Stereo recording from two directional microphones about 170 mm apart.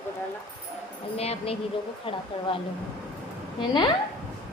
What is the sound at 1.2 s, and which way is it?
Speech, 35° left (ahead or behind).